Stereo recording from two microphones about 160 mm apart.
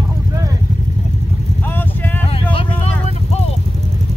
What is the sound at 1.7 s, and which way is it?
Vehicle, 10° left (ahead or behind).